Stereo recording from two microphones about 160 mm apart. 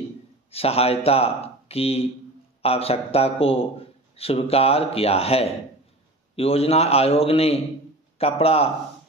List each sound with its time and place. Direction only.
0.5 s speech: 40° left (ahead or behind)